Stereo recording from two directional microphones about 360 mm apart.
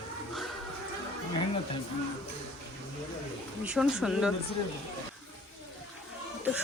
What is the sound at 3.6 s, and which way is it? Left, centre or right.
Speech, centre.